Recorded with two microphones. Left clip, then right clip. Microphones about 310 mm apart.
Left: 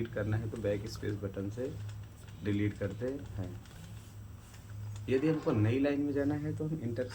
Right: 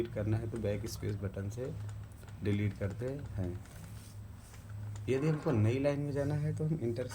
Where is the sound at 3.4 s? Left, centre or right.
Right.